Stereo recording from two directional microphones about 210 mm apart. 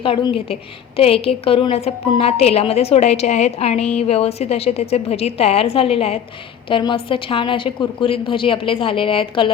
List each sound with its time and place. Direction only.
0.0 s a woman's voice: 25° left (ahead or behind)